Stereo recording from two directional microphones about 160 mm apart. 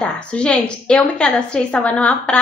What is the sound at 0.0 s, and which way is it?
A woman's voice, 5° left (ahead or behind).